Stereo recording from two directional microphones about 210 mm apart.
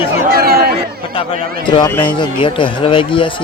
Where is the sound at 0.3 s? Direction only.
45° right (ahead or behind).